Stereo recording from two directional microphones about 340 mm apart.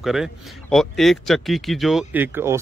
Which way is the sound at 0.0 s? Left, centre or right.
Centre.